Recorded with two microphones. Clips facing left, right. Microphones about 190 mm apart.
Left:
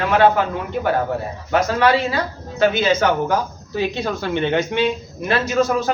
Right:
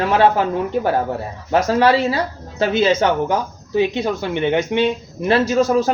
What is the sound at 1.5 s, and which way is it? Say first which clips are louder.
Speech: right 2 dB; 35° right (ahead or behind).